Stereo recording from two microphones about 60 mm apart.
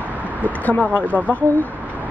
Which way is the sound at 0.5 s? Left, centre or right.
Left.